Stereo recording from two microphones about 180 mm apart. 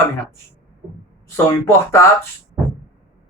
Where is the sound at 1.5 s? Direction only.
15° left (ahead or behind).